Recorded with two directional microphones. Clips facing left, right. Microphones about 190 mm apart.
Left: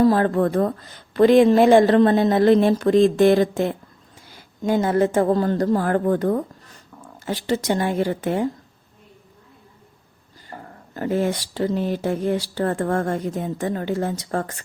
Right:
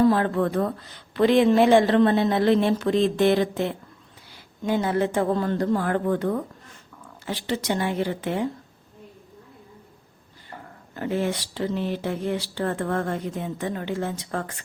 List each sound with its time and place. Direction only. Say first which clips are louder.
0.0 s speech: left 3 dB; 40° left (ahead or behind)
10.5 s speech: left 4 dB; 40° left (ahead or behind)